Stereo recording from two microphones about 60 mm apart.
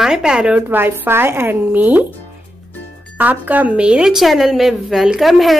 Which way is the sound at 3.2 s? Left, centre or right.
Right.